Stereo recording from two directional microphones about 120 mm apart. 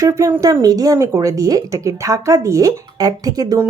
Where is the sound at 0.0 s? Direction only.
25° right (ahead or behind).